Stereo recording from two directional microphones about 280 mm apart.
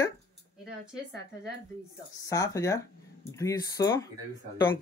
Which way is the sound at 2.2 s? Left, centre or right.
Centre.